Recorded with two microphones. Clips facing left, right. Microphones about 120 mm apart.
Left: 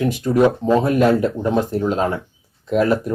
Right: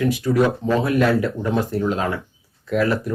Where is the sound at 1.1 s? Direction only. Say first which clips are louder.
Left 3 dB; 20° left (ahead or behind).